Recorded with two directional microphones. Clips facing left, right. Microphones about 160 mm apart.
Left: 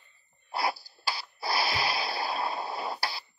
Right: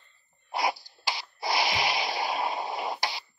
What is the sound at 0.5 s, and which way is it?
Sneeze, 20° right (ahead or behind).